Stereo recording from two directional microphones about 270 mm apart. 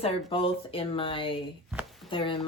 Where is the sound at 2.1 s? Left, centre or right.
Centre.